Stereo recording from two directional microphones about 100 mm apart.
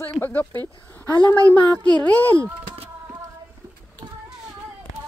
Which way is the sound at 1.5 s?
15° left (ahead or behind).